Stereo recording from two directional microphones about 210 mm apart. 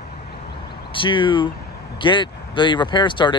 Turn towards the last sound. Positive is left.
turn(degrees=20)  # may be behind; listen again after turning